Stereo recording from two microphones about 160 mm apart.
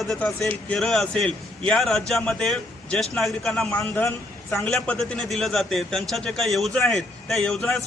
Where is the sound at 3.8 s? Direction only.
20° left (ahead or behind).